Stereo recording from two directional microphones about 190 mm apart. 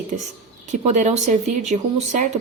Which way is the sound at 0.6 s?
40° right (ahead or behind).